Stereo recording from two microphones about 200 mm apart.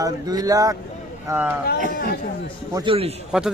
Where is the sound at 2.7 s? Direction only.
15° right (ahead or behind).